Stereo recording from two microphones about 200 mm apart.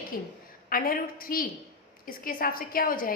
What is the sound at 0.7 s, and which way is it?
A woman's voice, 45° left (ahead or behind).